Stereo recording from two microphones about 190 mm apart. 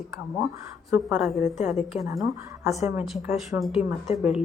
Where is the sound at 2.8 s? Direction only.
15° right (ahead or behind).